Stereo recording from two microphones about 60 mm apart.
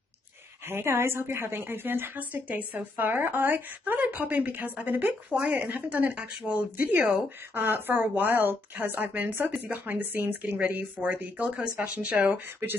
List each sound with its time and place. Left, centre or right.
0.7 s a woman's voice: right
5.3 s speech: centre
5.6 s speech: right
7.5 s a woman's voice: right